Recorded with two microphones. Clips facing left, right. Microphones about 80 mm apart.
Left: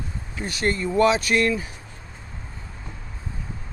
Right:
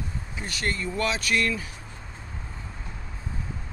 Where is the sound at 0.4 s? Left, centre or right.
Left.